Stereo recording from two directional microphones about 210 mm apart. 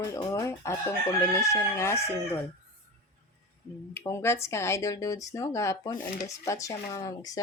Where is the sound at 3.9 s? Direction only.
10° left (ahead or behind).